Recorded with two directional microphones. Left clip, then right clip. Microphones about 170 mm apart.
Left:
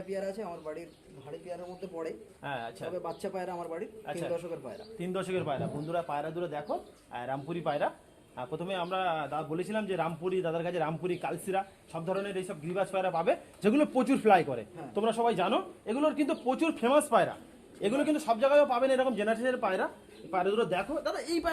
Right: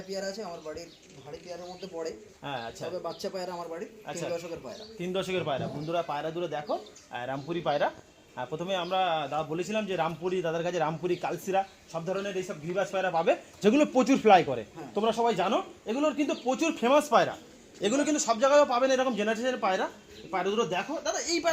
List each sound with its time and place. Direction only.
0.3 s speech: 5° left (ahead or behind)
2.4 s a man's voice: 45° right (ahead or behind)
2.9 s speech: 5° right (ahead or behind)
4.9 s a man's voice: 50° right (ahead or behind)